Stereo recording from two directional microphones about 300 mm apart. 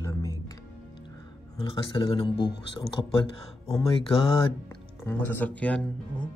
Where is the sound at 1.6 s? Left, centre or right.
Centre.